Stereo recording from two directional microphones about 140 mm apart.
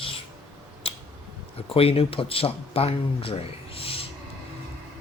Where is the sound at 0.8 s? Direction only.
40° left (ahead or behind).